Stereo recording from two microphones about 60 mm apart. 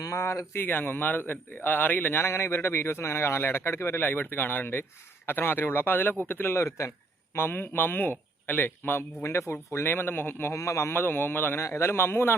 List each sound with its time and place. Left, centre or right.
0.0 s speech: left
0.5 s a man's voice: left
6.6 s a man's voice: left
7.3 s a man's voice: left
9.2 s a man's voice: left
10.6 s speech: left
10.9 s a man's voice: left
11.6 s a man's voice: left